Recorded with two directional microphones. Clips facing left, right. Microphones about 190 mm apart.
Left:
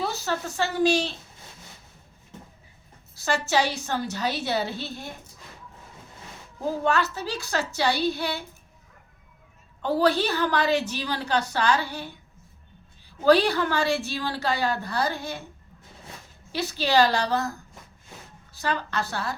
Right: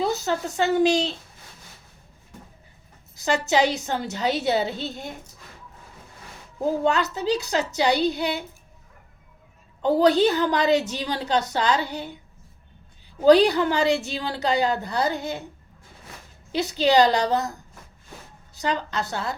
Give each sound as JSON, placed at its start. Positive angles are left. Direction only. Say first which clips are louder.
{"t": 0.0, "sound": "a woman's voice", "louder": "right 4 dB", "side_deg": -20}
{"t": 3.2, "sound": "a woman's voice", "louder": "right 3 dB", "side_deg": -20}
{"t": 6.8, "sound": "a woman's voice", "louder": "right 1 dB", "side_deg": -20}
{"t": 9.8, "sound": "a woman's voice", "louder": "right 5 dB", "side_deg": -20}
{"t": 13.2, "sound": "a woman's voice", "louder": "right 4 dB", "side_deg": -20}
{"t": 16.5, "sound": "a woman's voice", "louder": "right 5 dB", "side_deg": -20}
{"t": 18.5, "sound": "a woman's voice", "louder": "right 2 dB", "side_deg": -20}